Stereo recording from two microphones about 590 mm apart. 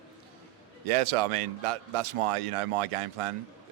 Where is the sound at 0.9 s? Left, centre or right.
Right.